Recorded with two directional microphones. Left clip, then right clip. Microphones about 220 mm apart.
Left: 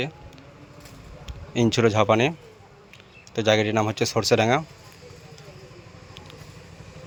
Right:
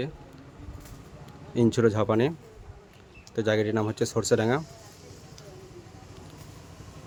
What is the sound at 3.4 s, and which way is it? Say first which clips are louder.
Speech: left 5 dB; 5° left (ahead or behind).